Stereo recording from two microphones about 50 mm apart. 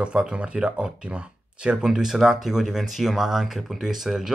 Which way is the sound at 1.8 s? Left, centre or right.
Centre.